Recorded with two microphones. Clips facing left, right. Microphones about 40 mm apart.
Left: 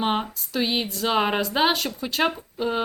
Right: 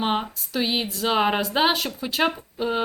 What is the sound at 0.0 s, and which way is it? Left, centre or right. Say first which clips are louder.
A woman's voice: even; centre.